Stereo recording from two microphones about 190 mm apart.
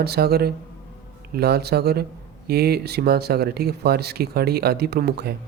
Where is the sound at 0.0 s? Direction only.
55° right (ahead or behind).